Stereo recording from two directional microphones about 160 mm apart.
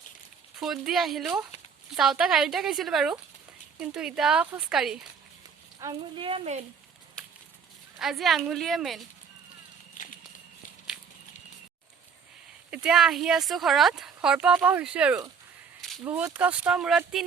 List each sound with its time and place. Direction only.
0.6 s speech: centre (ahead or behind)
5.8 s speech: 25° right (ahead or behind)
7.9 s speech: centre (ahead or behind)
10.0 s a sound: 55° left (ahead or behind)
12.7 s speech: 5° right (ahead or behind)